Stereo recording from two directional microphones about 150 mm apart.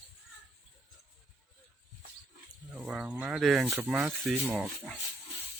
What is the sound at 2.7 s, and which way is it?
Speech, 5° right (ahead or behind).